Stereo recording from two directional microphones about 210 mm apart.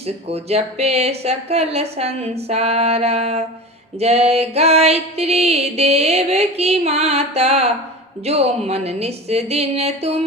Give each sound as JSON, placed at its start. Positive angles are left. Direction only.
{"t": 0.3, "sound": "music", "side_deg": -30}